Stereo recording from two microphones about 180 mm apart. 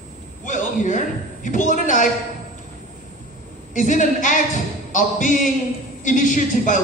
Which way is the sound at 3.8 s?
45° left (ahead or behind).